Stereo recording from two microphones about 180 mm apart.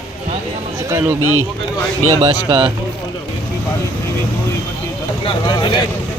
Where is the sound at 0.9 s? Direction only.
15° right (ahead or behind).